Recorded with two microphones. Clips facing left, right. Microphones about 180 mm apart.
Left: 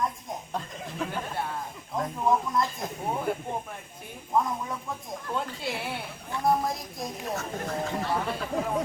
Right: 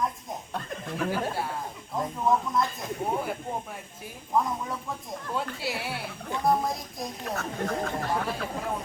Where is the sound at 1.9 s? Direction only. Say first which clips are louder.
Even; centre (ahead or behind).